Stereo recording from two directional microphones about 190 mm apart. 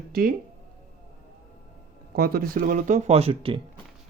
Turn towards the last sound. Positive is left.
turn(degrees=-30)  # may be behind; listen again after turning